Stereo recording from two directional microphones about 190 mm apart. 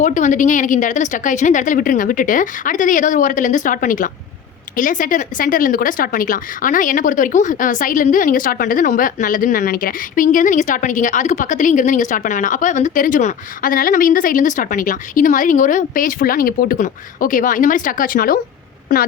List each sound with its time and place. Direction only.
0.0 s speech: 40° left (ahead or behind)